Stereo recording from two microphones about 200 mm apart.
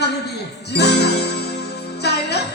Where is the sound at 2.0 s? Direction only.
55° left (ahead or behind).